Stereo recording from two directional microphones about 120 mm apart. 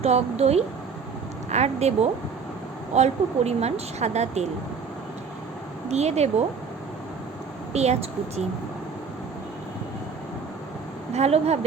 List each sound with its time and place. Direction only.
0.0 s a woman's voice: 60° right (ahead or behind)
5.9 s a woman's voice: 65° right (ahead or behind)
7.7 s speech: 65° right (ahead or behind)
11.1 s a woman's voice: 65° right (ahead or behind)